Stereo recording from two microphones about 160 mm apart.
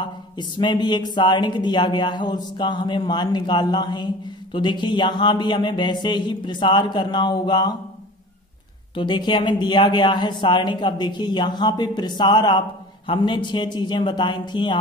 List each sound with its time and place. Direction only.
0.0 s speech: 30° left (ahead or behind)
8.9 s speech: 30° left (ahead or behind)